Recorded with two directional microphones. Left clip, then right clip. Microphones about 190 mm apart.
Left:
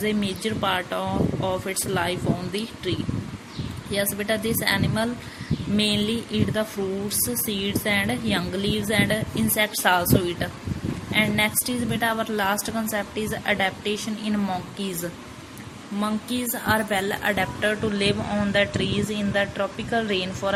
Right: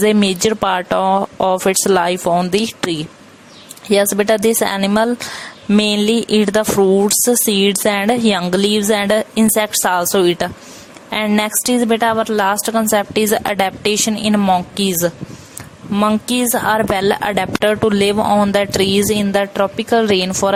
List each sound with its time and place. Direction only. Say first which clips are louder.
0.0 s speech: right 12 dB; 55° right (ahead or behind)
3.9 s speech: right 12 dB; 50° right (ahead or behind)